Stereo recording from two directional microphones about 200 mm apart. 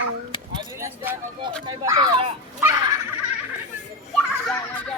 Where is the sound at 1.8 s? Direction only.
20° right (ahead or behind).